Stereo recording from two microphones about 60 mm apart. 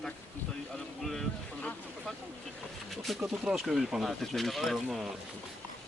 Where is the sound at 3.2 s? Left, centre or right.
Centre.